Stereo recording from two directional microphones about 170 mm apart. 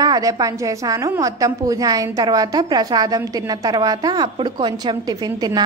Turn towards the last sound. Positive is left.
turn(degrees=-25)  # may be behind; listen again after turning